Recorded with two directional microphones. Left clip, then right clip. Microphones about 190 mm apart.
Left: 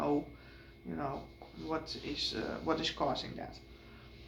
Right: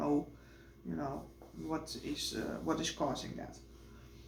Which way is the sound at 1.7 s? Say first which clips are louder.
Left 2 dB; 30° right (ahead or behind).